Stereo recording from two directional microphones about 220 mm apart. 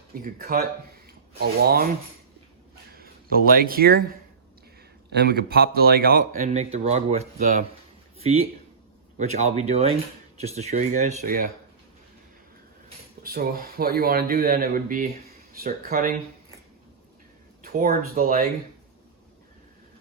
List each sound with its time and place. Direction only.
0.3 s speech: 40° right (ahead or behind)
2.9 s speech: 40° right (ahead or behind)
5.1 s speech: 50° right (ahead or behind)
13.2 s speech: 45° right (ahead or behind)
17.6 s speech: 40° right (ahead or behind)